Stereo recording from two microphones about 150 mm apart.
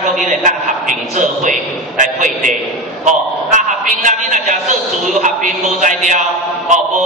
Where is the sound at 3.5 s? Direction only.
55° right (ahead or behind).